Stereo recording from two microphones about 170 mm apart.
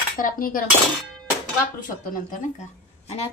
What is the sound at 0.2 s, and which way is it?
Cutlery, 55° left (ahead or behind).